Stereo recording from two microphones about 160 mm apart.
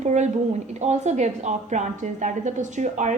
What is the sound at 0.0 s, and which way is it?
A woman's voice, 45° right (ahead or behind).